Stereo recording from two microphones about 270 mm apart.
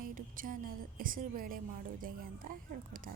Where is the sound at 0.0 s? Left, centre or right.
Right.